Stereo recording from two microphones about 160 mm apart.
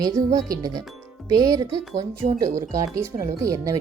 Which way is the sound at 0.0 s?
25° right (ahead or behind).